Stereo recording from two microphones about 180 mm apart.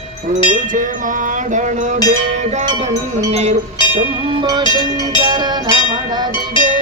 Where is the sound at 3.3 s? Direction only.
35° right (ahead or behind).